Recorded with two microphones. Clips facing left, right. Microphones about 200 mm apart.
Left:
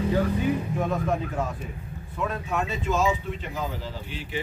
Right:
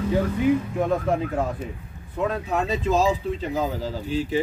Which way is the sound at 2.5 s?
35° right (ahead or behind).